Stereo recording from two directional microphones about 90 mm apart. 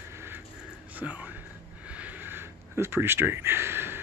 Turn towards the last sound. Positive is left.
turn(degrees=-25)  # may be behind; listen again after turning